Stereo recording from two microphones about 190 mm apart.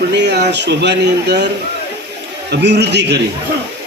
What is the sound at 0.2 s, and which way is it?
Speech, 60° right (ahead or behind).